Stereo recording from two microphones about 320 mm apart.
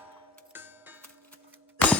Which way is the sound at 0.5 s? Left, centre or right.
Centre.